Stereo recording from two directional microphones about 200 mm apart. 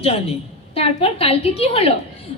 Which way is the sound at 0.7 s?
30° left (ahead or behind).